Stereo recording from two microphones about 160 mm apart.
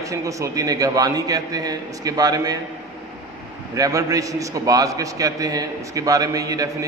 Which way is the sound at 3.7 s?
20° right (ahead or behind).